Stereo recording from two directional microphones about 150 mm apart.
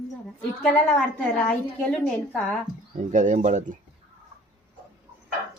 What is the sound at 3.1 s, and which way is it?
Speech, 55° right (ahead or behind).